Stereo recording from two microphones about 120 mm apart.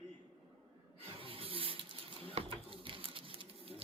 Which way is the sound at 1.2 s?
50° right (ahead or behind).